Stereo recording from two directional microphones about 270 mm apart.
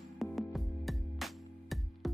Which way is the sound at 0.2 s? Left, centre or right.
Centre.